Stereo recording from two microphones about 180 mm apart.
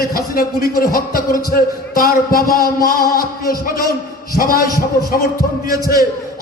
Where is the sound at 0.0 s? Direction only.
55° left (ahead or behind).